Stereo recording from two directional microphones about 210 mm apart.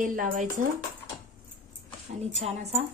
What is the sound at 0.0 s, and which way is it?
Speech, 40° right (ahead or behind).